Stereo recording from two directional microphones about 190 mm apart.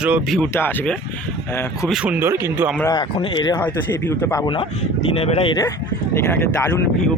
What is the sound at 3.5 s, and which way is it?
Speech, 10° left (ahead or behind).